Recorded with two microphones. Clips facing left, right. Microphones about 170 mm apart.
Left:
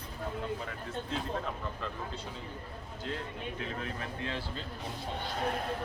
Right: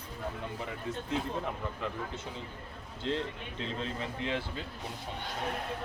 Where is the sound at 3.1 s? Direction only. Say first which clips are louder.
Right 4 dB; 25° right (ahead or behind).